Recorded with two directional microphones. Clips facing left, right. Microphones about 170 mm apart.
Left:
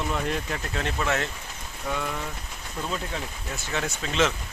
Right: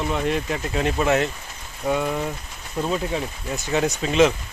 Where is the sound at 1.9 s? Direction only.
20° right (ahead or behind).